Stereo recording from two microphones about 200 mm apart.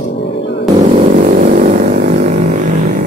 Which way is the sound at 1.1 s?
40° right (ahead or behind).